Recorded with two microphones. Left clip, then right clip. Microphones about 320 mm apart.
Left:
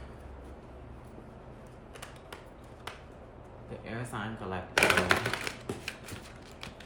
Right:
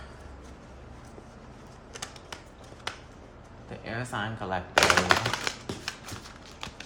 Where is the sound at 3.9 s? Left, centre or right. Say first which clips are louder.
Right 6 dB; right.